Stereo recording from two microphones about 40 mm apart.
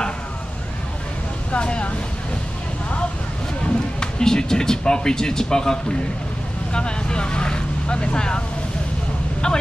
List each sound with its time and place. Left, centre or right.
1.5 s speech: left
4.0 s speech: centre
9.4 s speech: centre